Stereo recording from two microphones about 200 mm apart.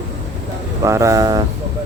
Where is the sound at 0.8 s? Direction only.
15° right (ahead or behind).